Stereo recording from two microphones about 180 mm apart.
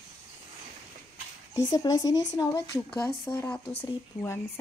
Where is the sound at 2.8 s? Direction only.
5° left (ahead or behind).